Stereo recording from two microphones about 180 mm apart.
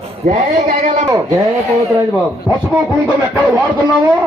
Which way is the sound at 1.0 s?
15° right (ahead or behind).